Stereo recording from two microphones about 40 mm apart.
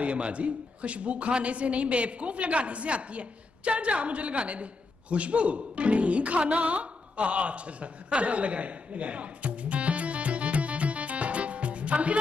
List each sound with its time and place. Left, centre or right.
0.0 s a woman's voice: right